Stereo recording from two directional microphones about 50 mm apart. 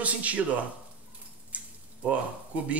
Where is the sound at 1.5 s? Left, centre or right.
Right.